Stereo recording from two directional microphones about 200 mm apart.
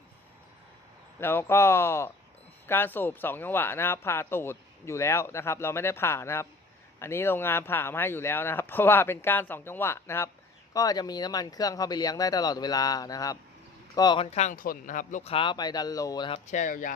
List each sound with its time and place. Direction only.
1.2 s speech: 10° left (ahead or behind)
16.5 s speech: 40° left (ahead or behind)